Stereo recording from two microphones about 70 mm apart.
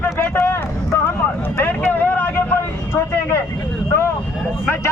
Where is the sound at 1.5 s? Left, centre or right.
Left.